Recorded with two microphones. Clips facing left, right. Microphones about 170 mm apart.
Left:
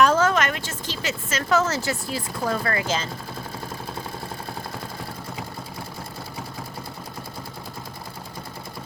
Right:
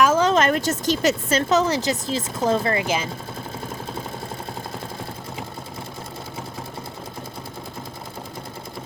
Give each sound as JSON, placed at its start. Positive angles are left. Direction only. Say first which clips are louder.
{"t": 0.2, "sound": "a sound", "louder": "right 3 dB", "side_deg": -25}
{"t": 0.5, "sound": "a woman's voice", "louder": "right 11 dB", "side_deg": -40}
{"t": 1.5, "sound": "speech", "louder": "left 1 dB", "side_deg": -15}